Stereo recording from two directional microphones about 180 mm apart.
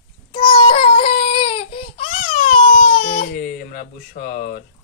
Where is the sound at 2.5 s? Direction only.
50° left (ahead or behind).